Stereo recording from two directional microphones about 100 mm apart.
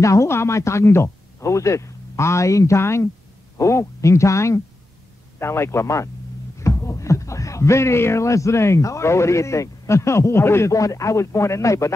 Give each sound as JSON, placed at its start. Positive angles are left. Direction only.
{"t": 0.0, "sound": "speech", "side_deg": 30}